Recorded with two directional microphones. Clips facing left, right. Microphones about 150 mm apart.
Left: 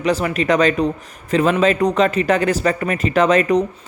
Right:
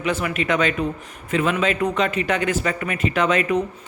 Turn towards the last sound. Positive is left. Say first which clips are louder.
# left 5 dB
turn(degrees=40)  # may be behind; listen again after turning